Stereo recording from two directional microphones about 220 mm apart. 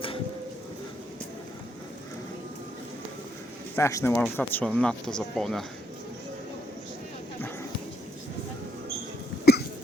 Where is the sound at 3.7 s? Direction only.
15° left (ahead or behind).